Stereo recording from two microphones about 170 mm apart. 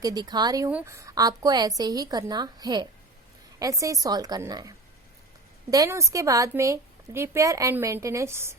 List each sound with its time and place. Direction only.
0.0 s a woman's voice: 25° right (ahead or behind)
5.7 s a woman's voice: 20° right (ahead or behind)